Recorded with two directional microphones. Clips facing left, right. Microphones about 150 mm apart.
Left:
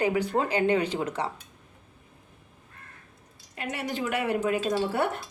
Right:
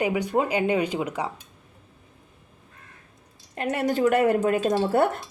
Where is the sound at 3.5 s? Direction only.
50° right (ahead or behind).